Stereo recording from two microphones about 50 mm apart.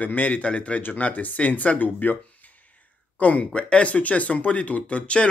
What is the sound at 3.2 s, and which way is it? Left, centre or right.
Speech, left.